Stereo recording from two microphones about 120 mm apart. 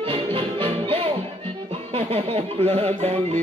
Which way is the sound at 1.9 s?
55° right (ahead or behind).